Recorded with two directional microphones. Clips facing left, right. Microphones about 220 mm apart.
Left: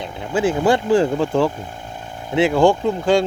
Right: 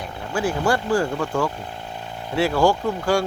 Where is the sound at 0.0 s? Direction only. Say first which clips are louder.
Left 5 dB; 20° left (ahead or behind).